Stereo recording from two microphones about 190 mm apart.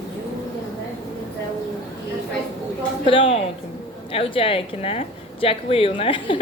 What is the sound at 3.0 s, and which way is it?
A woman's voice, 30° left (ahead or behind).